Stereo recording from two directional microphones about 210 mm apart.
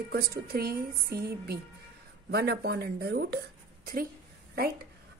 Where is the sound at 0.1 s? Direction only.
50° right (ahead or behind).